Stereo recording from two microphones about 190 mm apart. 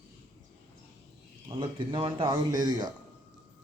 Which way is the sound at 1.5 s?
25° right (ahead or behind).